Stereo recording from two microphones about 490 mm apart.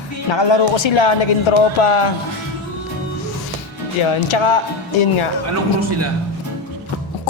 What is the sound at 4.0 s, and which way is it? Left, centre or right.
Speech, left.